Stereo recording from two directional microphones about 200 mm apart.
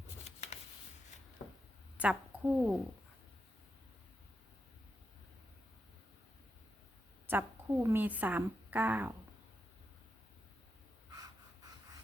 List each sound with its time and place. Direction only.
0.3 s a sound: 35° left (ahead or behind)
2.0 s a woman's voice: 5° right (ahead or behind)
7.3 s a woman's voice: 10° right (ahead or behind)